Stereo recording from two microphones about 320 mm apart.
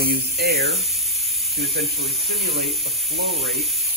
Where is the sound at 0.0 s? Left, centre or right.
Right.